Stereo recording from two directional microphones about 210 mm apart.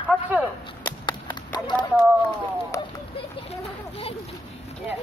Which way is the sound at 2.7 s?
15° left (ahead or behind).